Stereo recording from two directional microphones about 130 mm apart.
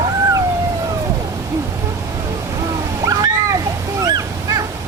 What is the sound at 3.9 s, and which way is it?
Honk, 30° right (ahead or behind).